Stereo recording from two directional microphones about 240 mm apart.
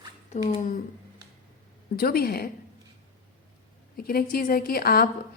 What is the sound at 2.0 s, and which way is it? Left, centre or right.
Speech, left.